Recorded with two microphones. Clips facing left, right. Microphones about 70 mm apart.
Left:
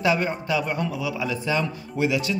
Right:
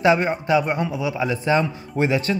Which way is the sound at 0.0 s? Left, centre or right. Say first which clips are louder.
Right 5 dB; right.